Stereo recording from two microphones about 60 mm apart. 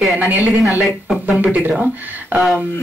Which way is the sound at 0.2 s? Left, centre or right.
Right.